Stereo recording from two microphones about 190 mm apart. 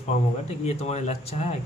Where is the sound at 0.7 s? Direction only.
35° left (ahead or behind).